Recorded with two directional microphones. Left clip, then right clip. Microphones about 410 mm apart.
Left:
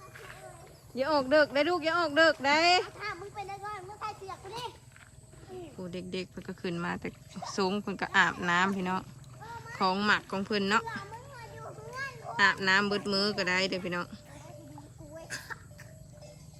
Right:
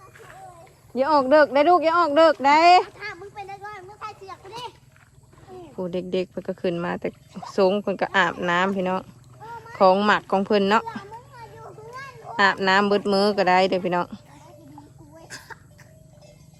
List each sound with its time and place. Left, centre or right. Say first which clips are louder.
0.9 s speech: right 9 dB; centre
2.9 s children playing: right 3 dB; right
5.5 s speech: right 12 dB; centre
15.3 s a sound: right 1 dB; centre